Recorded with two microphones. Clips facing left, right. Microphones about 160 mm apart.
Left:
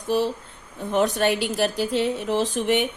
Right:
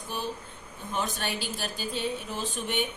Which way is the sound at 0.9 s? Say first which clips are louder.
Left 11 dB; 70° left (ahead or behind).